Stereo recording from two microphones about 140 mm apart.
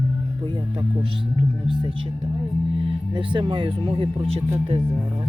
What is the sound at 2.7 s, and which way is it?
Speech, 35° right (ahead or behind).